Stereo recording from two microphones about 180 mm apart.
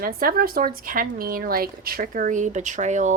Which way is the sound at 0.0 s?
55° right (ahead or behind).